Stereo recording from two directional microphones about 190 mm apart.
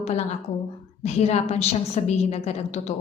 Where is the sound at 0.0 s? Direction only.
35° left (ahead or behind).